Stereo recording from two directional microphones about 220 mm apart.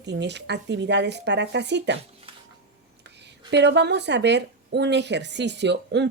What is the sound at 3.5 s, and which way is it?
Speech, 50° right (ahead or behind).